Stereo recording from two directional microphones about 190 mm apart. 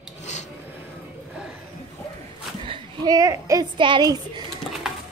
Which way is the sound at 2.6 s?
25° right (ahead or behind).